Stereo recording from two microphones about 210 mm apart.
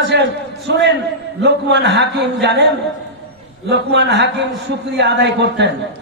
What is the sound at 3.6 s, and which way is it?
A man's voice, 55° right (ahead or behind).